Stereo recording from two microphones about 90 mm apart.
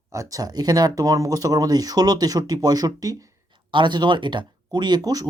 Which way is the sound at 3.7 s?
60° right (ahead or behind).